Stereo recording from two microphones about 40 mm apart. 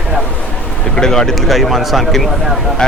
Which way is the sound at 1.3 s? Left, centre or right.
Centre.